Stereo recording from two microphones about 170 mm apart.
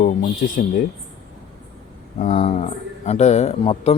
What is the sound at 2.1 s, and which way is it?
Speech, 35° left (ahead or behind).